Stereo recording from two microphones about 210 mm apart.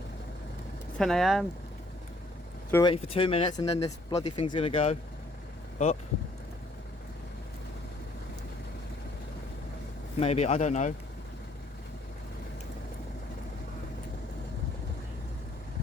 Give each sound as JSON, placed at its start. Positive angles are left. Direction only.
{"t": 0.9, "sound": "speech", "side_deg": 0}
{"t": 2.7, "sound": "speech", "side_deg": 25}
{"t": 10.2, "sound": "speech", "side_deg": 30}